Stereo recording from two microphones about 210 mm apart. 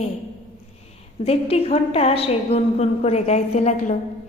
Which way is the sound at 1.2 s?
30° left (ahead or behind).